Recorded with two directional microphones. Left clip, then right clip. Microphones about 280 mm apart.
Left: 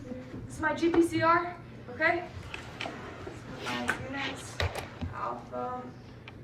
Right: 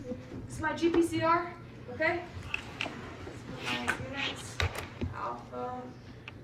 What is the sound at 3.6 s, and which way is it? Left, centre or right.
Speech, left.